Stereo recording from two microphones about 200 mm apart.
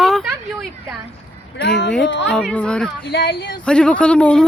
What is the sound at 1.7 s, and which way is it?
Speech, 60° left (ahead or behind).